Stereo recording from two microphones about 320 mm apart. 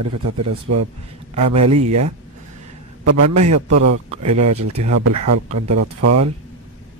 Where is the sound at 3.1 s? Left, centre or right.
Right.